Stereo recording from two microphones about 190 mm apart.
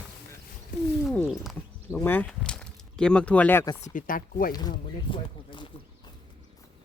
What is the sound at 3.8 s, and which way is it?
Speech, 45° left (ahead or behind).